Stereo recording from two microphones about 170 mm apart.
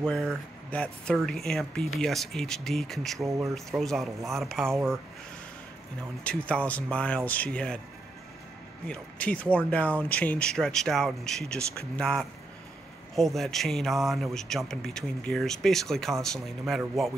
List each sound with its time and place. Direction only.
0.0 s a man's voice: 5° left (ahead or behind)
3.3 s speech: 20° right (ahead or behind)
3.5 s a man's voice: centre (ahead or behind)
6.2 s speech: 5° left (ahead or behind)
8.8 s a man's voice: 5° left (ahead or behind)